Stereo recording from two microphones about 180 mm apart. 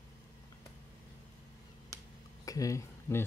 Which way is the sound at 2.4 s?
20° left (ahead or behind).